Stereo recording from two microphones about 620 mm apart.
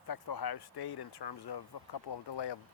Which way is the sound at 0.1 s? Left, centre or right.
Left.